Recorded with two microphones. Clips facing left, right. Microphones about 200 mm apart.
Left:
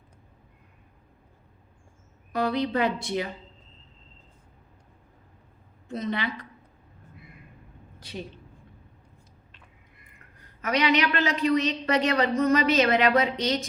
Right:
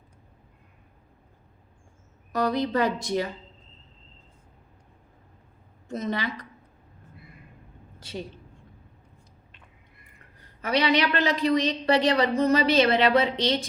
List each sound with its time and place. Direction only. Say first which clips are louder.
2.3 s a woman's voice: right 1 dB; 45° right (ahead or behind)
5.9 s a woman's voice: even; 45° right (ahead or behind)
10.6 s a woman's voice: right 1 dB; 35° right (ahead or behind)